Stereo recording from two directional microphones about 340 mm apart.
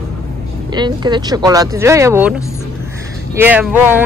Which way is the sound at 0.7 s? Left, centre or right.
Centre.